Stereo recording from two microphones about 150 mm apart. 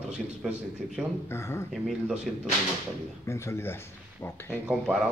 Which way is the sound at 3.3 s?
20° left (ahead or behind).